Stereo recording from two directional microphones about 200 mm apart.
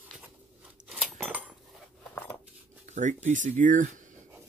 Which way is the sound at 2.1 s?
10° left (ahead or behind).